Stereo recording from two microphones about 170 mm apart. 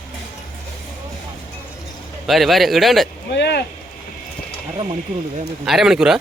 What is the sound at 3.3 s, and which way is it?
Speech, 80° left.